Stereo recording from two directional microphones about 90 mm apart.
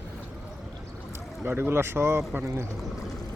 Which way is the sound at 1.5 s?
25° right (ahead or behind).